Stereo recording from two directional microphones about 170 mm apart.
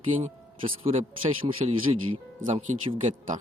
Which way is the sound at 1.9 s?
30° right (ahead or behind).